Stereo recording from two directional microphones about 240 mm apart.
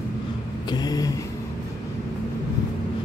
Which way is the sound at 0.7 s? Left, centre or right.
Centre.